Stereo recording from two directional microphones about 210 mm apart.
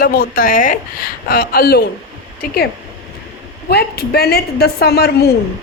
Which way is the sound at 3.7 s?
50° left (ahead or behind).